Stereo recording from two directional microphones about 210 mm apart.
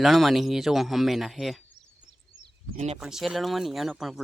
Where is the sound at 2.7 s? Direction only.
30° right (ahead or behind).